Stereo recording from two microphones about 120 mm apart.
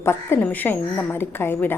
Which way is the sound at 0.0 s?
20° left (ahead or behind).